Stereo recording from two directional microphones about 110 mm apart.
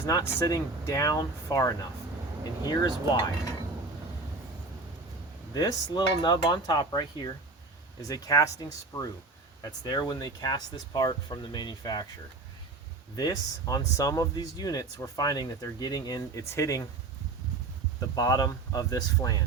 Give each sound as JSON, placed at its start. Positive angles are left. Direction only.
{"t": 0.0, "sound": "speech", "side_deg": 30}
{"t": 5.5, "sound": "speech", "side_deg": 40}
{"t": 13.1, "sound": "speech", "side_deg": 35}
{"t": 18.1, "sound": "speech", "side_deg": 35}